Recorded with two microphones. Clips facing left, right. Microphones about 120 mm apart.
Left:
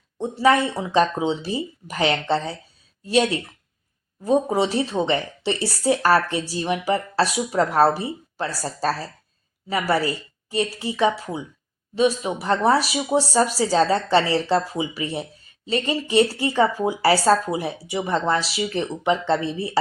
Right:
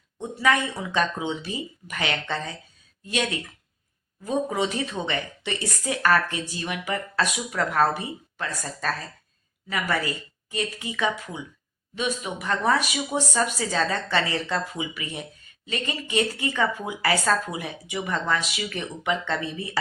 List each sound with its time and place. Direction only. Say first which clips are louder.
0.2 s speech: left 5 dB; 30° left (ahead or behind)